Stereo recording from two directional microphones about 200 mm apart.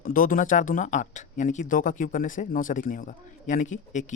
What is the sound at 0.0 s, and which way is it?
Speech, 45° left (ahead or behind).